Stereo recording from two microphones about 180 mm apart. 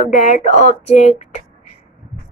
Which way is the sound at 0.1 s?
45° left (ahead or behind).